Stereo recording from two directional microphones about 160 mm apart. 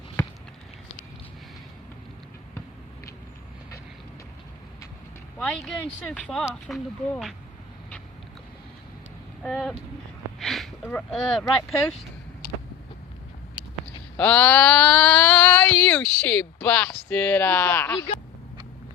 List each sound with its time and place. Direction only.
5.4 s speech: 5° left (ahead or behind)
9.4 s speech: centre (ahead or behind)
10.4 s a sound: centre (ahead or behind)
10.8 s speech: 10° left (ahead or behind)
14.2 s mantra: 10° left (ahead or behind)
17.1 s speech: 10° left (ahead or behind)